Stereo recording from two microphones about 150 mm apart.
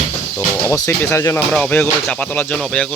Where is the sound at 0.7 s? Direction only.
15° left (ahead or behind).